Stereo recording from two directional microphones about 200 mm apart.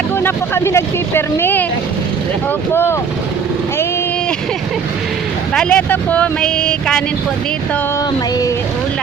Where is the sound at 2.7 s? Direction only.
10° left (ahead or behind).